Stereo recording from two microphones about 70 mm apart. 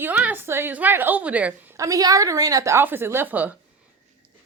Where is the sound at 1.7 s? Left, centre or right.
Right.